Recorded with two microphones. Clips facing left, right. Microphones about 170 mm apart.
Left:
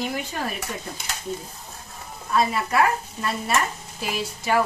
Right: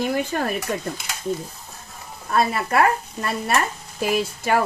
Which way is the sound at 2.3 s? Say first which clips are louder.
Right 2 dB; 55° right (ahead or behind).